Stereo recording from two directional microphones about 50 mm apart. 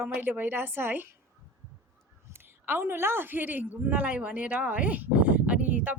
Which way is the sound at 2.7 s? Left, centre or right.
Right.